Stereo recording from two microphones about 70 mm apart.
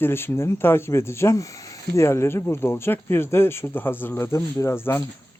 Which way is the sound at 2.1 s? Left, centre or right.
Left.